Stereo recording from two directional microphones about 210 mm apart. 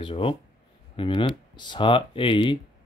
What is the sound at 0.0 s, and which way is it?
Speech, 25° left (ahead or behind).